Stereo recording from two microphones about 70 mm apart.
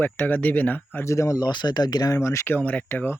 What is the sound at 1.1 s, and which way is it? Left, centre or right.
Speech, left.